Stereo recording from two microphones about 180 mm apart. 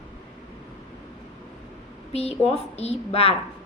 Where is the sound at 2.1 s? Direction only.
35° left (ahead or behind).